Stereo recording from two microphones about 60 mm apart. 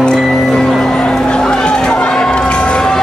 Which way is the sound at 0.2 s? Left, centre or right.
Centre.